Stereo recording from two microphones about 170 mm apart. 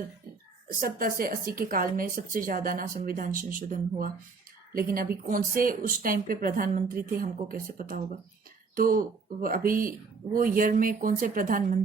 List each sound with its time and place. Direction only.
0.8 s speech: 55° right (ahead or behind)